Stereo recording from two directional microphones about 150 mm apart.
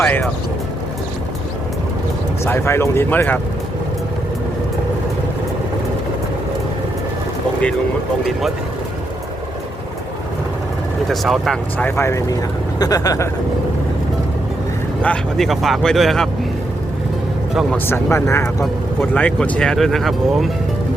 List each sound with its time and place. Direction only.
0.0 s speech: 10° left (ahead or behind)
2.4 s speech: 15° left (ahead or behind)
11.1 s speech: centre (ahead or behind); by 13.2 s 25° left (ahead or behind)
15.0 s speech: 5° left (ahead or behind)
17.5 s a man's voice: centre (ahead or behind)
17.8 s speech: 15° left (ahead or behind); by 20.5 s centre (ahead or behind)